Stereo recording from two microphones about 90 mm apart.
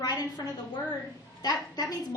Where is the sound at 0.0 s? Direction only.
45° left (ahead or behind).